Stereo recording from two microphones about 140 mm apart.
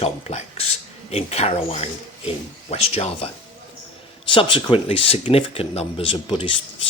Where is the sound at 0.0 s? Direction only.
50° left (ahead or behind).